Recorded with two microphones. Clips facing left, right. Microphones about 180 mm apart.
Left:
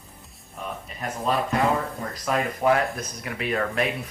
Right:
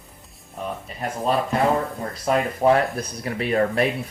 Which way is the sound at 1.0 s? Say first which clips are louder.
Right 3 dB; 35° right (ahead or behind).